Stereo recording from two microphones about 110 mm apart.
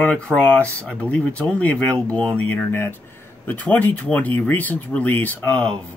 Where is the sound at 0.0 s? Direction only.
10° left (ahead or behind).